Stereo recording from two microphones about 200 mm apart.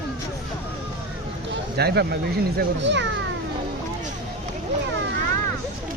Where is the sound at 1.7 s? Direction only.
55° right (ahead or behind).